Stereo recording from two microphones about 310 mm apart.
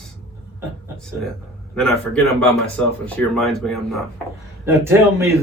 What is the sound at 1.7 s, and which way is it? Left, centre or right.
Speech, centre.